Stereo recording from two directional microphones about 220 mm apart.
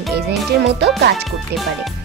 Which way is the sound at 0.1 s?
50° right (ahead or behind).